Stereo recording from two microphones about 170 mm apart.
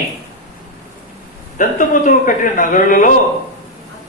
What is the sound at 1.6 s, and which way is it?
A man's voice, 50° left (ahead or behind).